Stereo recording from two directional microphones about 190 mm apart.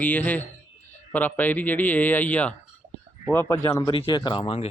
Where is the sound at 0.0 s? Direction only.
10° left (ahead or behind).